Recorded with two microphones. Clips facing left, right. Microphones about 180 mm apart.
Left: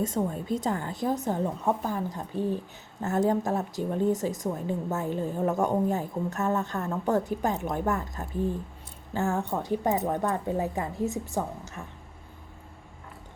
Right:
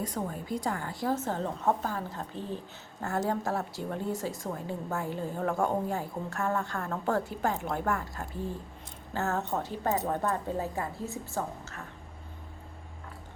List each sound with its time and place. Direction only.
0.0 s a woman's voice: 25° left (ahead or behind)